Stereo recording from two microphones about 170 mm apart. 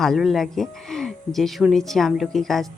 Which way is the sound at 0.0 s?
Centre (ahead or behind).